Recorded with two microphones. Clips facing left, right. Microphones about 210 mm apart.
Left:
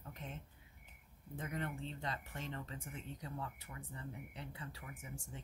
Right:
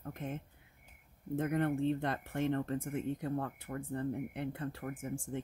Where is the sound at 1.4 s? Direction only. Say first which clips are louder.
Right 11 dB; 55° right (ahead or behind).